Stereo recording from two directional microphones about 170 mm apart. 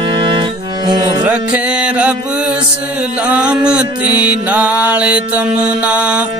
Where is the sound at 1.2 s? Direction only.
5° right (ahead or behind).